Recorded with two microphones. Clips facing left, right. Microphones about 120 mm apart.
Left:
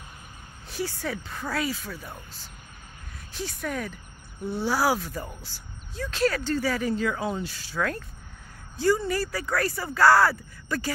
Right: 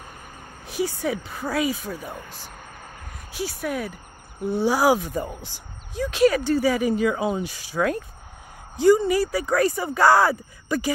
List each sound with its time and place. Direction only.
0.7 s speech: 15° right (ahead or behind)
3.3 s speech: 10° right (ahead or behind)